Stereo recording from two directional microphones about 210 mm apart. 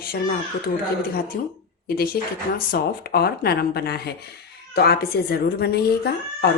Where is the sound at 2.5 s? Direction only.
45° left (ahead or behind).